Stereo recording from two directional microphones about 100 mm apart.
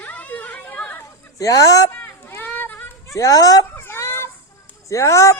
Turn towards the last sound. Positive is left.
turn(degrees=30)  # may be behind; listen again after turning